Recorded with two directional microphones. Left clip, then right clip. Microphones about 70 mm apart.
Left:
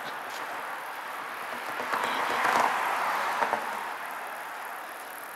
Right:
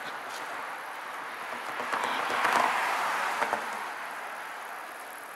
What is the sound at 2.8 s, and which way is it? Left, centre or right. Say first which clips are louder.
Vehicle: left 1 dB; right.